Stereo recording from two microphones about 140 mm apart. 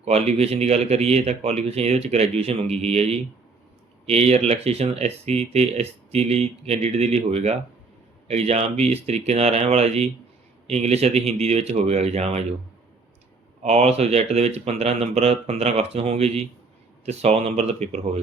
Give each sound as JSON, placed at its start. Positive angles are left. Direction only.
{"t": 0.0, "sound": "speech", "side_deg": -50}
{"t": 13.6, "sound": "speech", "side_deg": -50}